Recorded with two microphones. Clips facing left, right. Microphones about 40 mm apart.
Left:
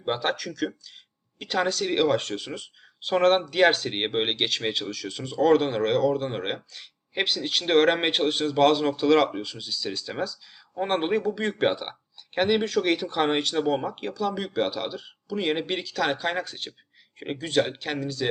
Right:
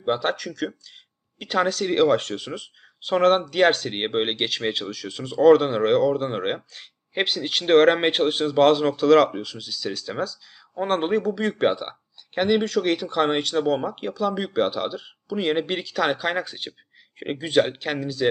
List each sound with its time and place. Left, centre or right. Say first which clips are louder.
0.0 s speech: right 3 dB; centre
16.5 s speech: right 2 dB; centre